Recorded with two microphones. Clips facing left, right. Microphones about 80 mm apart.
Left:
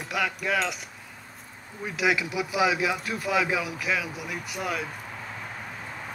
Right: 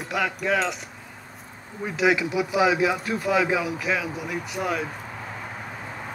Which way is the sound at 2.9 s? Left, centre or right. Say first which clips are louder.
Right 4 dB; centre.